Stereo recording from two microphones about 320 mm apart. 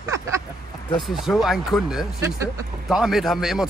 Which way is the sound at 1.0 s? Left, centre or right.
Centre.